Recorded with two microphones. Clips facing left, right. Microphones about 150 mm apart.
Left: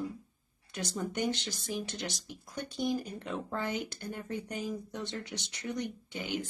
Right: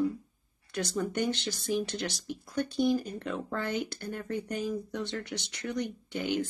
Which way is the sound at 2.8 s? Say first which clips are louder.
Right 5 dB; 15° left (ahead or behind).